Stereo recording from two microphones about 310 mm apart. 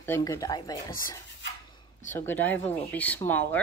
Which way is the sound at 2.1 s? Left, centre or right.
Centre.